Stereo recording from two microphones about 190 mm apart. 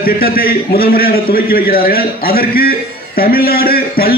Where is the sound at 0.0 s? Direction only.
50° left (ahead or behind).